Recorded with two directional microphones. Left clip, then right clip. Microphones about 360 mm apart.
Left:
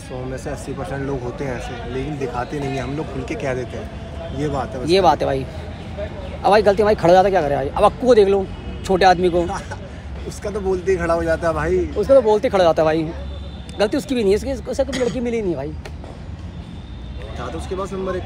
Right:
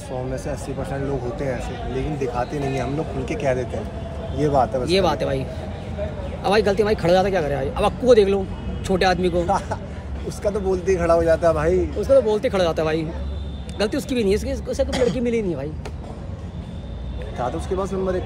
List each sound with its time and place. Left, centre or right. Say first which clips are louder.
1.4 s a man's voice: even; centre
4.8 s a man's voice: left 5 dB; centre
9.5 s speech: right 6 dB; centre
12.0 s a man's voice: left 4 dB; centre
14.9 s speech: right 1 dB; centre
15.1 s a man's voice: left 1 dB; centre
17.4 s speech: right 2 dB; centre